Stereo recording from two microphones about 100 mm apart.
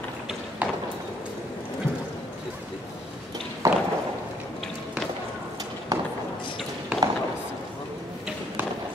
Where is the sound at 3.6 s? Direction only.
35° right (ahead or behind).